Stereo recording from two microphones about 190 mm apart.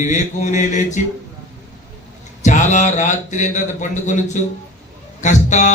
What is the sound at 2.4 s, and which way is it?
A man's voice, 40° left (ahead or behind).